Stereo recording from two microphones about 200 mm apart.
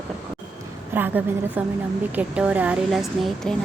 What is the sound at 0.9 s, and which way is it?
A woman's voice, 10° right (ahead or behind).